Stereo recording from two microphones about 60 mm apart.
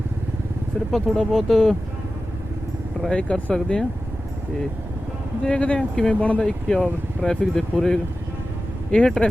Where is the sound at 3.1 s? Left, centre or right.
Centre.